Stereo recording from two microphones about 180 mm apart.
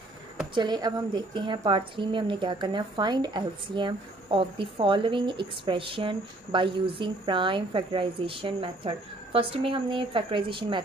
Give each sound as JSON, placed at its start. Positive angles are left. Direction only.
{"t": 0.6, "sound": "a woman's voice", "side_deg": -25}